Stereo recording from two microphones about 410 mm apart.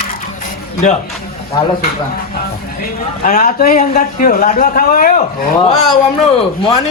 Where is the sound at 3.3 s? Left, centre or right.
Centre.